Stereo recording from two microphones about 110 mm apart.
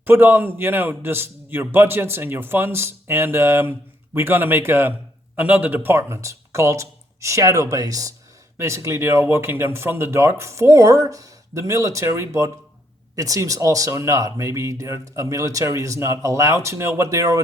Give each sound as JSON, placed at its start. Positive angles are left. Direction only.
{"t": 0.0, "sound": "a man's voice", "side_deg": -20}